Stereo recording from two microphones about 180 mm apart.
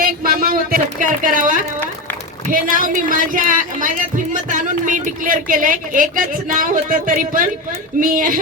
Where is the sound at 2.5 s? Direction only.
50° right (ahead or behind).